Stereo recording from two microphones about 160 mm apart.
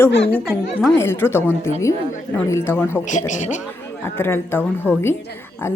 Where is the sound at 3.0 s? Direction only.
50° left (ahead or behind).